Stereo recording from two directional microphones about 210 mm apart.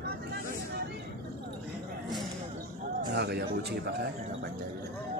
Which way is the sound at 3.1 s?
50° right (ahead or behind).